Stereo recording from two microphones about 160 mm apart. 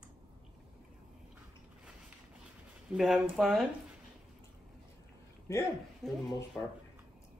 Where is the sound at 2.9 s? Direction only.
Centre (ahead or behind).